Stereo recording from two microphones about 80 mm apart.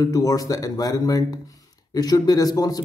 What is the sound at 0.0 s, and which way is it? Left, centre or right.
A man's voice, left.